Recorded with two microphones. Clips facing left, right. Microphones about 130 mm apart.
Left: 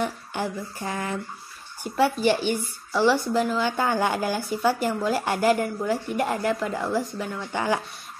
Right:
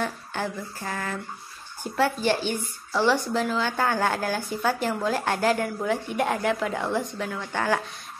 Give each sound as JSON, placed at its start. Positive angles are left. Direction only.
{"t": 0.0, "sound": "speech", "side_deg": 15}